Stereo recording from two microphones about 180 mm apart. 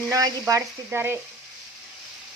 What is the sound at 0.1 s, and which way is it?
Frying, 20° right (ahead or behind).